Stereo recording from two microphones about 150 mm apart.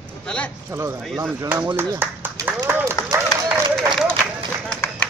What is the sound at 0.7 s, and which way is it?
A man's voice, 15° right (ahead or behind).